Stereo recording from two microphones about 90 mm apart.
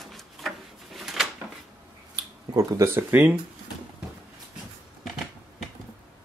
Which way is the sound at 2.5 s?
35° right (ahead or behind).